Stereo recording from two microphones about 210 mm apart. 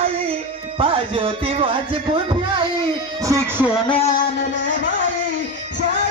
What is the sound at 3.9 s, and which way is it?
Music, 30° left (ahead or behind).